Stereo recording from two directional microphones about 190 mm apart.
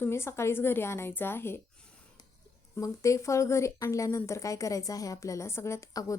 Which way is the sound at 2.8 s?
15° left (ahead or behind).